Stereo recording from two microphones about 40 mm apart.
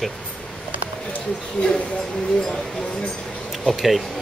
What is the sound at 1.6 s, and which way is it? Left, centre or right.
Speech, left.